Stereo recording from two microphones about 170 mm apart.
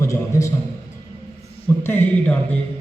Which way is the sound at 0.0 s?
20° left (ahead or behind).